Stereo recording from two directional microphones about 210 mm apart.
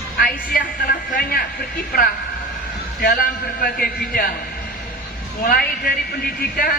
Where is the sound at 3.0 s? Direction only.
45° left (ahead or behind).